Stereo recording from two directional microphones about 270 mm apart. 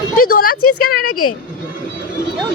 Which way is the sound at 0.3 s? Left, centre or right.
Left.